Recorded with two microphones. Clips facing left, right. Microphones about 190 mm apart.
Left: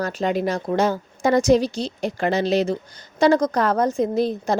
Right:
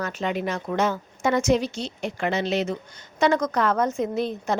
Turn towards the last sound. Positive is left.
turn(degrees=35)  # may be behind; listen again after turning